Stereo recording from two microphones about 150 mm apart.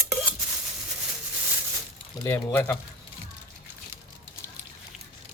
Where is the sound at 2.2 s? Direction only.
15° left (ahead or behind).